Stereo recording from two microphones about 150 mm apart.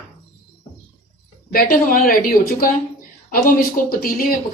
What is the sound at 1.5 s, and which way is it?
Speech, 65° left (ahead or behind).